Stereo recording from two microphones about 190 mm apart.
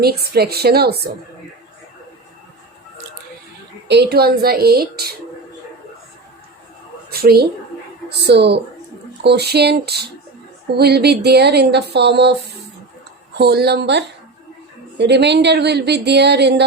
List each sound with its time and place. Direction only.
0.0 s speech: 55° right (ahead or behind)
3.8 s speech: 60° right (ahead or behind)
7.1 s a woman's voice: 55° right (ahead or behind)
13.3 s speech: 60° right (ahead or behind)